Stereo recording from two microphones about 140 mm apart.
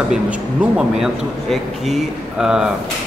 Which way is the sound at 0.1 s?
5° right (ahead or behind).